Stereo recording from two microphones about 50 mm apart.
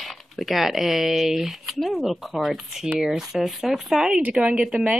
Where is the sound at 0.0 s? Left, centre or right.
Centre.